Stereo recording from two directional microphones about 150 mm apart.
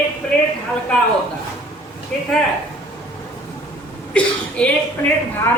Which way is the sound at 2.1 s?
5° left (ahead or behind).